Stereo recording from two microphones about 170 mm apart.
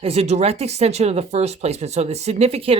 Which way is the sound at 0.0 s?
35° right (ahead or behind).